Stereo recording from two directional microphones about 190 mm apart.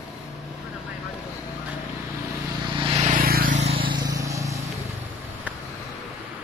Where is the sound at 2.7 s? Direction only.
30° right (ahead or behind).